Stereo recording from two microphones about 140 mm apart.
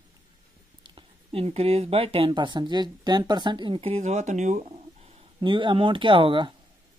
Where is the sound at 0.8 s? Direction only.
40° right (ahead or behind).